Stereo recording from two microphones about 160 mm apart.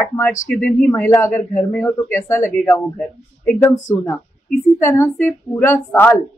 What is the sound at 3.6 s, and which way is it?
A man's voice, 20° left (ahead or behind).